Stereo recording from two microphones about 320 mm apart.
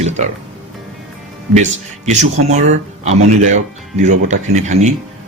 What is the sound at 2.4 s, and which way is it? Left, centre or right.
Speech, right.